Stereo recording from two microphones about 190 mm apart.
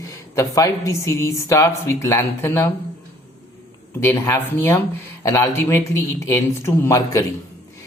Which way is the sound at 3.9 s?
15° left (ahead or behind).